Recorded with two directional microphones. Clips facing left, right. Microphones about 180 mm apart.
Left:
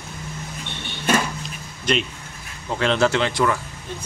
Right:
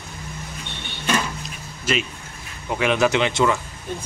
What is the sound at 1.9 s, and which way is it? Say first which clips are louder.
Speech: left 1 dB; 5° right (ahead or behind).